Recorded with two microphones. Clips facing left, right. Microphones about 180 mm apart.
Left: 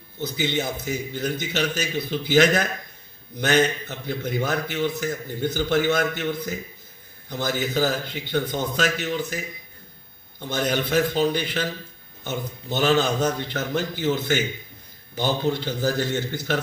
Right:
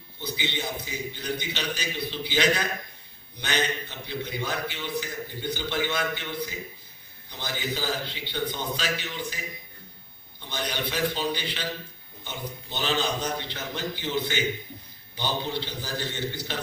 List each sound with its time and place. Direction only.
0.2 s a man's voice: 45° left (ahead or behind)
10.4 s a man's voice: 45° left (ahead or behind)